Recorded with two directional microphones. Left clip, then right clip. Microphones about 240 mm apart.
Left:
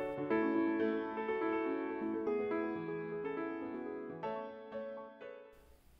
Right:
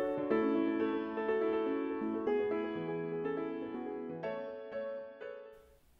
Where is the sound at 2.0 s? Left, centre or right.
Centre.